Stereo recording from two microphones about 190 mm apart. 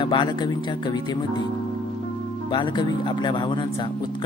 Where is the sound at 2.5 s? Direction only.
25° left (ahead or behind).